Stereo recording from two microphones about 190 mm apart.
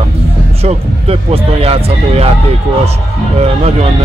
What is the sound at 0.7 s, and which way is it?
A man's voice, 30° right (ahead or behind).